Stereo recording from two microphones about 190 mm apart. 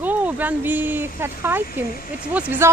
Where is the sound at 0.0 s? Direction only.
10° right (ahead or behind).